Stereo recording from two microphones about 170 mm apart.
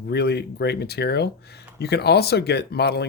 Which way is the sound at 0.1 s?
70° left (ahead or behind).